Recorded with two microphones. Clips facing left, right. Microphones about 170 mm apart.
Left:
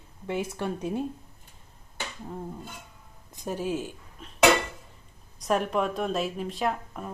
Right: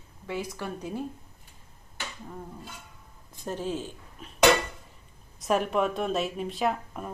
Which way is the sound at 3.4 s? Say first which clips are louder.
Left 2 dB; 10° left (ahead or behind).